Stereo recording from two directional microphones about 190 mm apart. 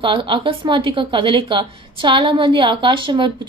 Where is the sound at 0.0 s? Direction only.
25° right (ahead or behind).